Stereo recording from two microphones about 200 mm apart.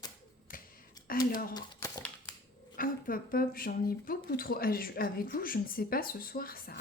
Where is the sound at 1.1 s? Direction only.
45° left (ahead or behind).